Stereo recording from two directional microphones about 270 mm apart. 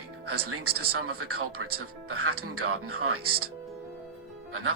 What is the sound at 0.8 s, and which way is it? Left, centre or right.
Speech, right.